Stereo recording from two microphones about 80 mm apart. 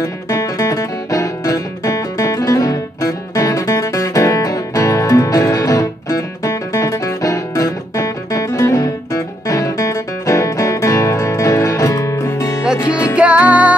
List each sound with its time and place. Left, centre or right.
0.0 s music: left
13.1 s music: centre